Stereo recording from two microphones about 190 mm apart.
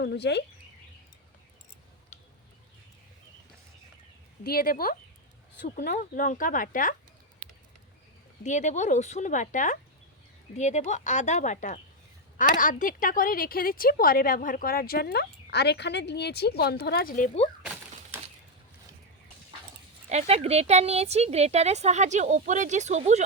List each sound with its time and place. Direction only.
0.0 s speech: 60° left (ahead or behind)
4.4 s speech: 50° left (ahead or behind)
8.4 s a woman's voice: 40° left (ahead or behind)
20.1 s speech: 35° right (ahead or behind)